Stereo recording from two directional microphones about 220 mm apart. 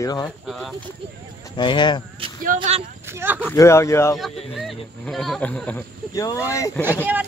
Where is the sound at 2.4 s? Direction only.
35° right (ahead or behind).